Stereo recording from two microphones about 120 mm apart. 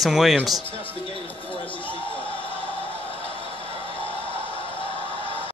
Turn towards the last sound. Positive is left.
turn(degrees=45)  # may be behind; listen again after turning